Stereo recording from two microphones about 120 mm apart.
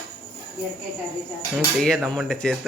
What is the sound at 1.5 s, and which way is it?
Speech, centre (ahead or behind).